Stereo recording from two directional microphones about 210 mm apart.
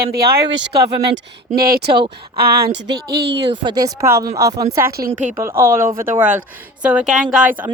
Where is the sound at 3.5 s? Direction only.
20° right (ahead or behind).